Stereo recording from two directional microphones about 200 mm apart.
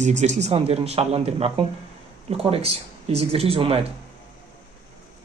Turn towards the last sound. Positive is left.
turn(degrees=-30)  # may be behind; listen again after turning